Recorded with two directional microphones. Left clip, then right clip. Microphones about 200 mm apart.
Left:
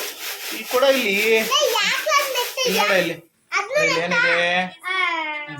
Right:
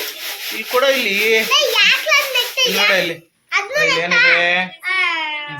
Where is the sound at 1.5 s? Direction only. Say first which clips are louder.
Right 6 dB; 20° left (ahead or behind).